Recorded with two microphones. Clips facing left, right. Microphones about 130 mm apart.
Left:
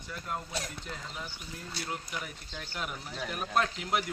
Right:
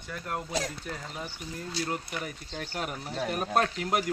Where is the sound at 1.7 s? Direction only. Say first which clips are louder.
Right 5 dB; 40° right (ahead or behind).